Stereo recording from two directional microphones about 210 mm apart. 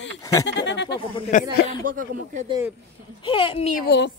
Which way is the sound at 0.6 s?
55° left (ahead or behind).